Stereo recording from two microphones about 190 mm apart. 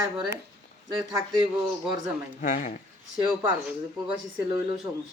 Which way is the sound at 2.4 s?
45° left (ahead or behind).